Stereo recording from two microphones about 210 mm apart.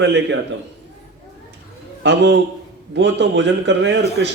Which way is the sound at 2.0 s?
55° right (ahead or behind).